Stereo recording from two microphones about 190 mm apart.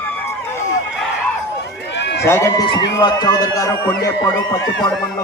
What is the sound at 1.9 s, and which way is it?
Run, 65° left (ahead or behind).